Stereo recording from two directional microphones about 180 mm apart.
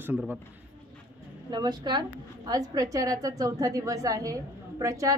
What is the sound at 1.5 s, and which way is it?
A woman's voice, 25° right (ahead or behind).